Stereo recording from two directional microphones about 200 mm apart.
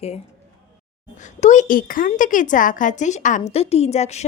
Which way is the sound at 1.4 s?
35° left (ahead or behind).